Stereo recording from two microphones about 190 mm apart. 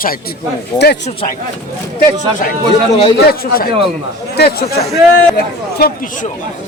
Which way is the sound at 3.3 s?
50° left (ahead or behind).